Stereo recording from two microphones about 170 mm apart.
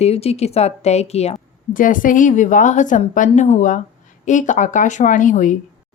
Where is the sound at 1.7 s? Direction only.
50° left (ahead or behind).